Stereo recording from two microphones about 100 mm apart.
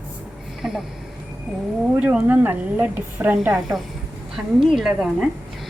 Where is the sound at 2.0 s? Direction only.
15° right (ahead or behind).